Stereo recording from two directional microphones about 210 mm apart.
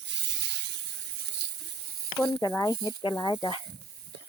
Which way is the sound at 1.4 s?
50° right (ahead or behind).